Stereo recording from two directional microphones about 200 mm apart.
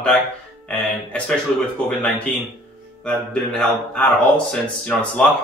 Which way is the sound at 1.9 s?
5° left (ahead or behind).